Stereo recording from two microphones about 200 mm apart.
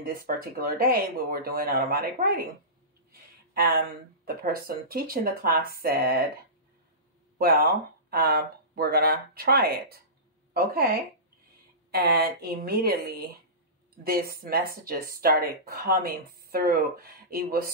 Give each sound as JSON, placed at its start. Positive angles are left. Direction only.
{"t": 0.0, "sound": "speech", "side_deg": -45}
{"t": 3.1, "sound": "a sound", "side_deg": -50}
{"t": 4.2, "sound": "speech", "side_deg": -50}
{"t": 7.3, "sound": "speech", "side_deg": -50}